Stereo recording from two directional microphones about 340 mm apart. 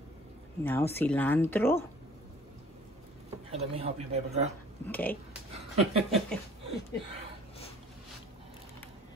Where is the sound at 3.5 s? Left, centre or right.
Centre.